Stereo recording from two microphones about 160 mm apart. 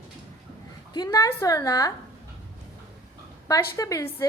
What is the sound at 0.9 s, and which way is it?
A woman's voice, 20° left (ahead or behind).